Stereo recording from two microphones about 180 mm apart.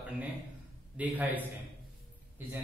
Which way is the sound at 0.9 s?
10° right (ahead or behind).